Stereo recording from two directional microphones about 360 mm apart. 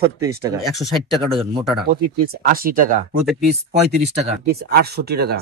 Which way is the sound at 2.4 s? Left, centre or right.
Right.